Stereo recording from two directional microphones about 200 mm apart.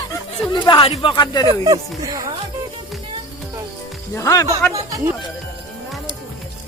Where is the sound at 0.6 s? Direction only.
25° left (ahead or behind).